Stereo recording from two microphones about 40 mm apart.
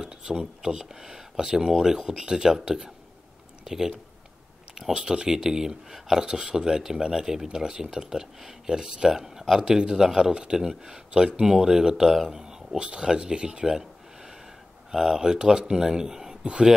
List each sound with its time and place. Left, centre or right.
0.0 s speech: centre
4.9 s speech: right
14.9 s speech: centre